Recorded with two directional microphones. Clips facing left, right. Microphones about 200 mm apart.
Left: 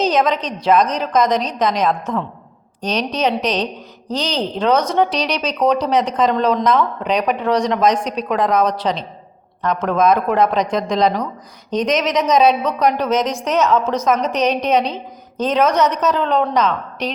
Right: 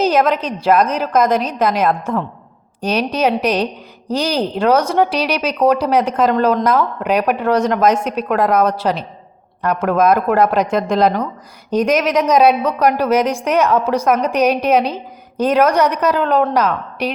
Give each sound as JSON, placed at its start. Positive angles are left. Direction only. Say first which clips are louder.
{"t": 0.0, "sound": "speech", "louder": "right 2 dB", "side_deg": -5}